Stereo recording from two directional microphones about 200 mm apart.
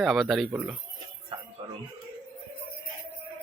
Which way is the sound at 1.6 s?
25° right (ahead or behind).